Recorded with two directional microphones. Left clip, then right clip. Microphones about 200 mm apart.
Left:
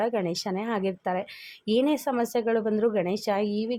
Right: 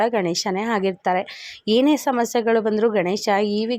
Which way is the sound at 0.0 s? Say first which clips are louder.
Right 7 dB; 20° right (ahead or behind).